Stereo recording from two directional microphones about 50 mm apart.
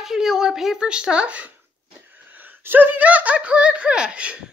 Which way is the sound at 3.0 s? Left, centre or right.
Right.